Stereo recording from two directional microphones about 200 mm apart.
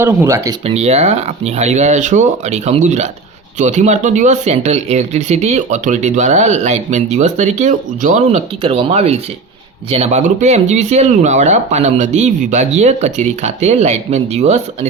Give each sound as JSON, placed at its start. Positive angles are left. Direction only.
{"t": 0.0, "sound": "speech", "side_deg": -10}
{"t": 0.6, "sound": "speech", "side_deg": -30}